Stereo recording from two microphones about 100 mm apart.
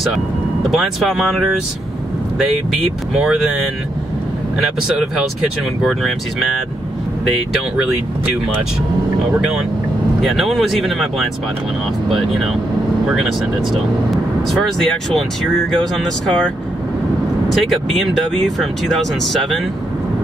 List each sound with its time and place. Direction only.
0.7 s speech: centre (ahead or behind)
3.1 s speech: 5° right (ahead or behind)
4.6 s speech: 5° right (ahead or behind)
10.2 s speech: centre (ahead or behind)
13.7 s speech: centre (ahead or behind)